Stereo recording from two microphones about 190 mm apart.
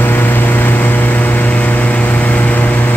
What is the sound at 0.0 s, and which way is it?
Vehicle, 10° left (ahead or behind).